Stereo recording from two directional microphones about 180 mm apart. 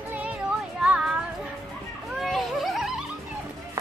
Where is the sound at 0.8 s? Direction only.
5° right (ahead or behind).